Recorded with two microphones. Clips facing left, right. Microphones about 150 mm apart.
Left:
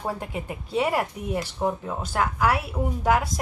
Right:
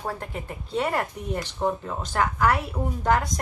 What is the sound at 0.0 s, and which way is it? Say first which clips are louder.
A woman's voice: left 2 dB; 10° left (ahead or behind).